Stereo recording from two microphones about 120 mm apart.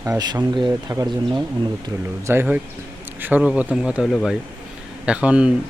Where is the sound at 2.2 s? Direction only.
20° right (ahead or behind).